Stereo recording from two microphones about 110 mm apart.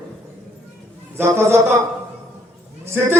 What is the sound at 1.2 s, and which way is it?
Speech, 25° right (ahead or behind).